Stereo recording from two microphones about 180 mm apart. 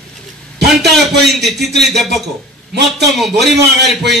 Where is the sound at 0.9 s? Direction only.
Centre (ahead or behind).